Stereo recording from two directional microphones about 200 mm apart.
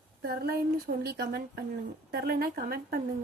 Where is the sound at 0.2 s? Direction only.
50° right (ahead or behind).